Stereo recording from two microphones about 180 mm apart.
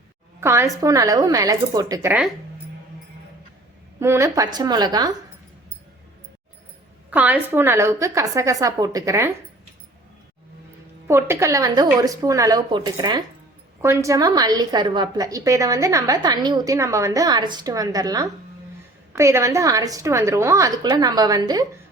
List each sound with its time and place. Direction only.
0.3 s a woman's voice: 15° right (ahead or behind)
4.0 s a woman's voice: 15° right (ahead or behind)
7.1 s a woman's voice: 10° right (ahead or behind)
11.1 s a woman's voice: 15° right (ahead or behind)